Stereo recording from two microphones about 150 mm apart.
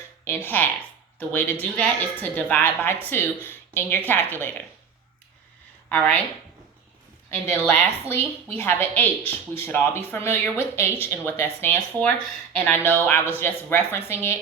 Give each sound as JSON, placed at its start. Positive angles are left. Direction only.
{"t": 0.3, "sound": "speech", "side_deg": 15}
{"t": 5.9, "sound": "speech", "side_deg": 10}
{"t": 7.3, "sound": "speech", "side_deg": 15}